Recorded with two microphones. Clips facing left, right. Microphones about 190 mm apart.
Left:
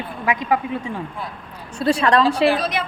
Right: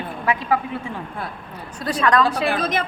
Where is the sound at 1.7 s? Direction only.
30° left (ahead or behind).